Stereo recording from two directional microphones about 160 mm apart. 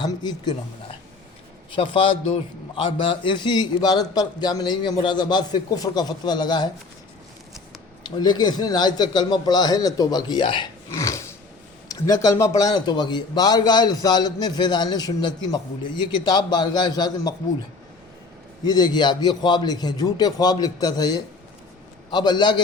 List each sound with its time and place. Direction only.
0.0 s a man's voice: 25° left (ahead or behind)
8.0 s a man's voice: 25° left (ahead or behind)
10.9 s a sound: 20° left (ahead or behind)
11.9 s a man's voice: 20° left (ahead or behind)
18.6 s a man's voice: 25° left (ahead or behind)